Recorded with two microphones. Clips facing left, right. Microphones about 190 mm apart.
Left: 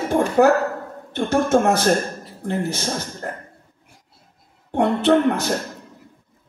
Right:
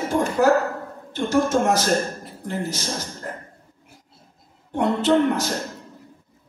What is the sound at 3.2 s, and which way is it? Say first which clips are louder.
Cough: left 3 dB; 60° left (ahead or behind).